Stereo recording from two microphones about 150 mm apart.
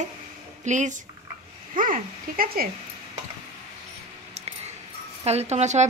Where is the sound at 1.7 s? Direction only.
65° right (ahead or behind).